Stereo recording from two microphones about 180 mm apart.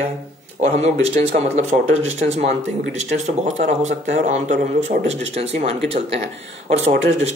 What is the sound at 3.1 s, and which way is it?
Speech, 40° right (ahead or behind).